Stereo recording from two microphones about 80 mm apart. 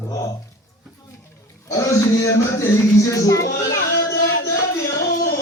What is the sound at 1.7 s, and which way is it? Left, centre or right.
Speech, left.